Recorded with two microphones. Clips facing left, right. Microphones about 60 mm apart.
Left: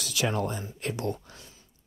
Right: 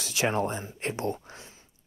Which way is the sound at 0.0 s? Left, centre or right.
Right.